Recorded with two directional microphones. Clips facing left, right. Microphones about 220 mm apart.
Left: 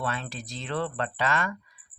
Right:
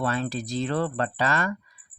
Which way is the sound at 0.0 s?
40° right (ahead or behind).